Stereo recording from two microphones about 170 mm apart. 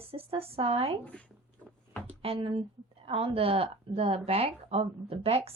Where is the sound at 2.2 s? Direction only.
35° right (ahead or behind).